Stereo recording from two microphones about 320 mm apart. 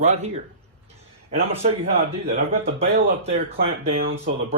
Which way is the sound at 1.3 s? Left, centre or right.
Centre.